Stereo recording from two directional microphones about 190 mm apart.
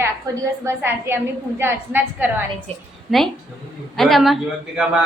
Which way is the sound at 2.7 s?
30° right (ahead or behind).